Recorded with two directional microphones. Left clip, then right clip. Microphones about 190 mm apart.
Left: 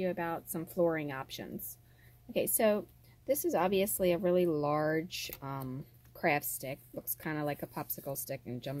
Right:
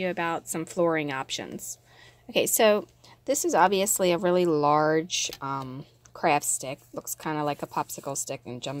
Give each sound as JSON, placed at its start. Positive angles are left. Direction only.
{"t": 0.0, "sound": "speech", "side_deg": -35}